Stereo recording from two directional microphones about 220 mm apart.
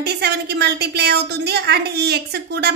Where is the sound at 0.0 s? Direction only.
45° right (ahead or behind).